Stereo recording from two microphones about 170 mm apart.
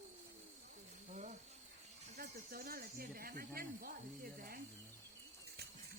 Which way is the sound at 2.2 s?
60° right (ahead or behind).